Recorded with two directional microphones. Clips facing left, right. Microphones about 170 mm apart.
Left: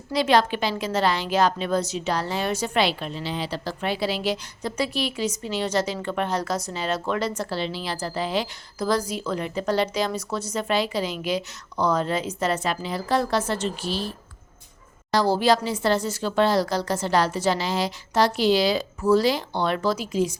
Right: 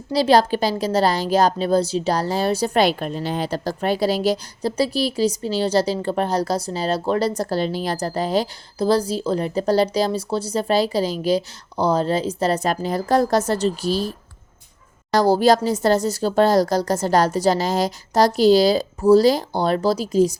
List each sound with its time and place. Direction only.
0.1 s a woman's voice: 35° right (ahead or behind)
15.1 s a woman's voice: 45° right (ahead or behind)